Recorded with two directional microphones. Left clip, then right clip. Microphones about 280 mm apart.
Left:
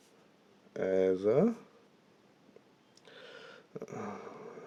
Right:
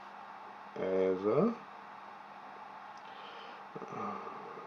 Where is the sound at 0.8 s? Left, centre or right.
Left.